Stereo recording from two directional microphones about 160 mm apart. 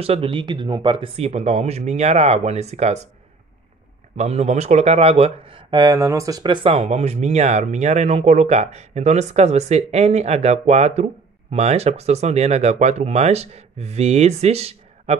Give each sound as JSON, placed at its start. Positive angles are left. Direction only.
{"t": 0.0, "sound": "speech", "side_deg": -35}
{"t": 4.2, "sound": "speech", "side_deg": -45}